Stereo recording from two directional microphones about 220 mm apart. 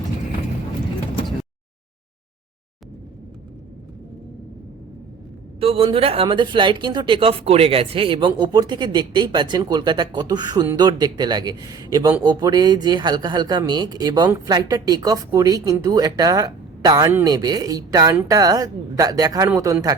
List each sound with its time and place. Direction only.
5.5 s speech: 25° right (ahead or behind)